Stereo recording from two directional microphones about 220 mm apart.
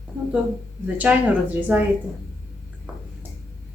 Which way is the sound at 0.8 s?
5° right (ahead or behind).